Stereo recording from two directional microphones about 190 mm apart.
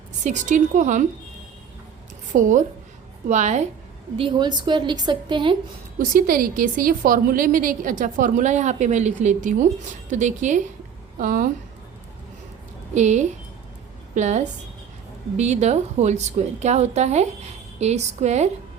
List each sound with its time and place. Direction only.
0.3 s a woman's voice: 40° right (ahead or behind)
2.3 s a woman's voice: 40° right (ahead or behind)
4.2 s a woman's voice: 25° right (ahead or behind)
6.0 s a woman's voice: 50° right (ahead or behind)
12.9 s a woman's voice: 40° right (ahead or behind)